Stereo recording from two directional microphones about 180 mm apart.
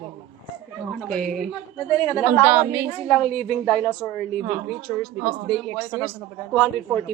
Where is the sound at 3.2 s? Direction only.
5° left (ahead or behind).